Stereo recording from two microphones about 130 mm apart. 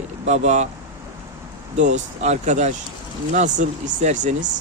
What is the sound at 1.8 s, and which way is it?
Speech, 60° right (ahead or behind).